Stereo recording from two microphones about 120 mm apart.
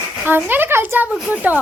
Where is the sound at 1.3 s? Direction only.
15° right (ahead or behind).